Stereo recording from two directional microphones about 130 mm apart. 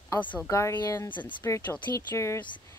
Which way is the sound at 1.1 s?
35° left (ahead or behind).